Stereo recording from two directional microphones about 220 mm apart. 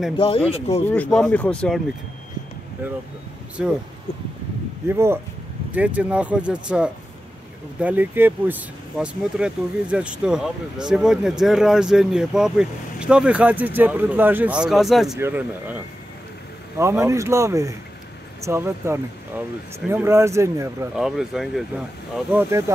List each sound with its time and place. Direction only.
0.2 s speech: 25° left (ahead or behind)
0.8 s speech: 5° left (ahead or behind)
4.8 s speech: 10° right (ahead or behind)